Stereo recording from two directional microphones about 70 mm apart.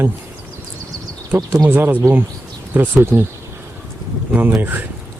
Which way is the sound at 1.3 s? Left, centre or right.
Right.